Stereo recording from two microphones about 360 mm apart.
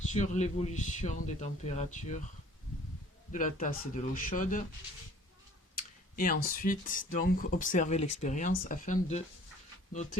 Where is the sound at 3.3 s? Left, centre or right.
Left.